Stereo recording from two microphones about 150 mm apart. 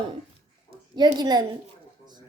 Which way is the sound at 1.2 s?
30° right (ahead or behind).